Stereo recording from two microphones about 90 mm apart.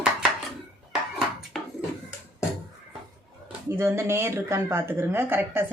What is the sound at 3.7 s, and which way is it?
Speech, 25° right (ahead or behind).